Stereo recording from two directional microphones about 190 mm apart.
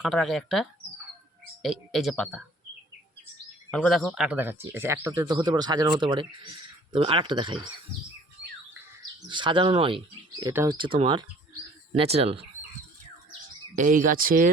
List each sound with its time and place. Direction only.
0.0 s speech: centre (ahead or behind)
3.7 s speech: 5° left (ahead or behind); by 7.7 s 25° right (ahead or behind)
9.3 s speech: 25° right (ahead or behind)
10.4 s speech: 15° right (ahead or behind)
10.8 s speech: 25° right (ahead or behind)
13.7 s speech: 45° right (ahead or behind)